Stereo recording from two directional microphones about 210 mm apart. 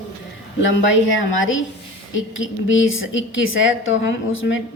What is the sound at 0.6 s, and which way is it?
Speech, 65° left (ahead or behind).